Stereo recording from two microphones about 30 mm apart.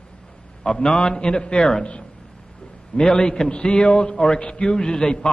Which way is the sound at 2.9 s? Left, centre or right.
Left.